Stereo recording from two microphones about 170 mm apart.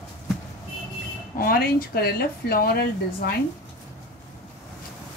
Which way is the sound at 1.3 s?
60° left (ahead or behind).